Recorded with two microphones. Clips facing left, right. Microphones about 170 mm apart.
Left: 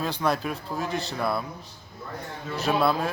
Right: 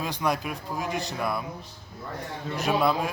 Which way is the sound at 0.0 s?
15° right (ahead or behind).